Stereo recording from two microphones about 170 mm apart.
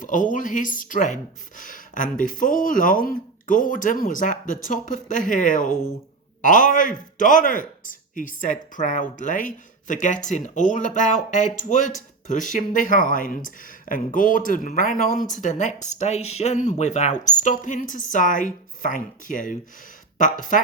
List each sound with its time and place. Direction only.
0.0 s a man's voice: 50° left (ahead or behind)